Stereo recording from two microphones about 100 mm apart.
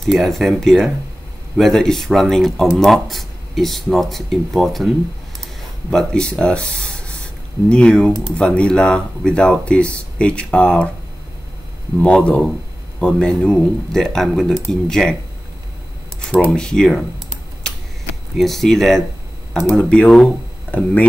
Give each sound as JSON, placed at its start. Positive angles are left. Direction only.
{"t": 0.0, "sound": "speech", "side_deg": 5}
{"t": 12.0, "sound": "speech", "side_deg": 10}
{"t": 16.3, "sound": "speech", "side_deg": 10}
{"t": 18.4, "sound": "speech", "side_deg": 5}